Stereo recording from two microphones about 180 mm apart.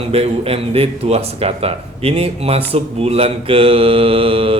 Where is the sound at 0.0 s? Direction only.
35° right (ahead or behind).